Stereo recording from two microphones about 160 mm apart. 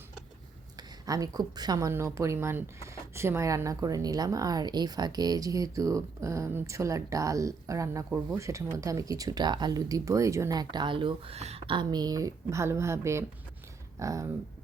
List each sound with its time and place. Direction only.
0.8 s a woman's voice: 25° right (ahead or behind)